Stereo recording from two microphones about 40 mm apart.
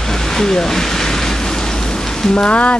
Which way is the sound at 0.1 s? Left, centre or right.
Centre.